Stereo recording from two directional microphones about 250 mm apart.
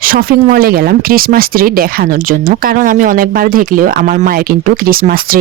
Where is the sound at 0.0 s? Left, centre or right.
Right.